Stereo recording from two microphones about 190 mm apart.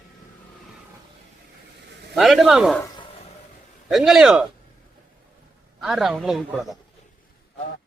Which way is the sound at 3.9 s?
Centre (ahead or behind).